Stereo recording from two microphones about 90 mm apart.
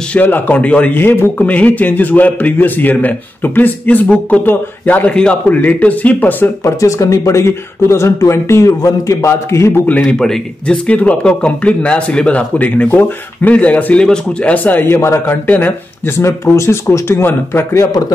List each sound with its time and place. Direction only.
0.1 s speech: 20° left (ahead or behind)
6.6 s speech: 40° left (ahead or behind)
10.0 s speech: 5° left (ahead or behind)
16.2 s speech: 30° left (ahead or behind)